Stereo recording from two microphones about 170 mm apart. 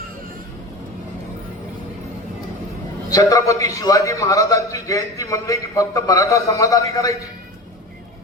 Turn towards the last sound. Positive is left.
turn(degrees=20)  # may be behind; listen again after turning